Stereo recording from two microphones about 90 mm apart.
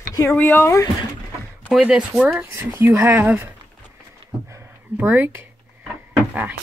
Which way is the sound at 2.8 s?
30° right (ahead or behind).